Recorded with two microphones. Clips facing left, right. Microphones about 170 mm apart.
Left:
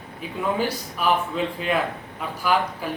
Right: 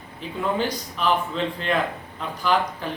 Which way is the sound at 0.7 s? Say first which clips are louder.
Even; 10° left (ahead or behind).